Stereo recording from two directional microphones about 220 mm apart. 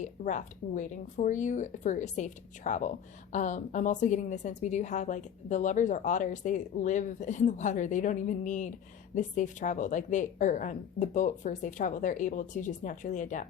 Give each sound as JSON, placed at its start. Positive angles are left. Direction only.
{"t": 0.0, "sound": "a woman's voice", "side_deg": 35}